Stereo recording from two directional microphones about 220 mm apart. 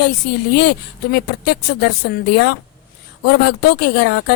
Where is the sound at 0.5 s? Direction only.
50° left (ahead or behind).